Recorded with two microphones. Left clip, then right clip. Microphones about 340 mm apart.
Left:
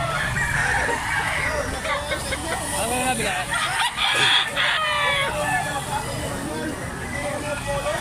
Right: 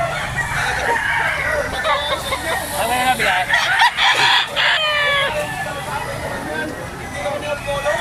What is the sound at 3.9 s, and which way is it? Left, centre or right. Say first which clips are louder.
Chicken: right 5 dB; centre.